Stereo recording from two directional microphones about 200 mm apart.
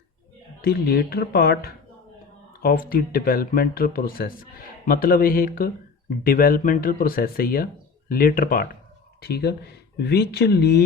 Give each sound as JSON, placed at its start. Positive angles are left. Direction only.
{"t": 0.6, "sound": "speech", "side_deg": 50}